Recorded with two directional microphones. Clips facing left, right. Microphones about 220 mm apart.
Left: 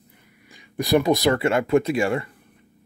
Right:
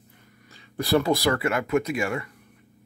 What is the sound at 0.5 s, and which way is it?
Speech, 15° left (ahead or behind).